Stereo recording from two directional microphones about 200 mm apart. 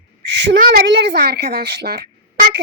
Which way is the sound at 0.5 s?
50° right (ahead or behind).